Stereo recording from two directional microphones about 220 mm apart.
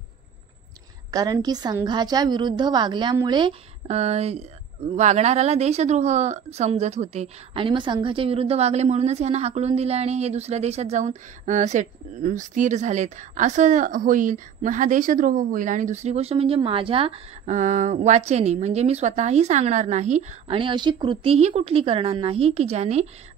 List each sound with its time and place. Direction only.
1.1 s a woman's voice: 15° right (ahead or behind)